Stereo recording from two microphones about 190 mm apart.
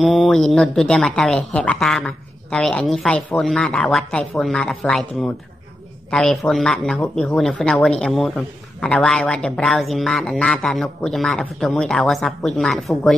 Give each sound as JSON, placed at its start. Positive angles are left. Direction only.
{"t": 0.0, "sound": "speech", "side_deg": 0}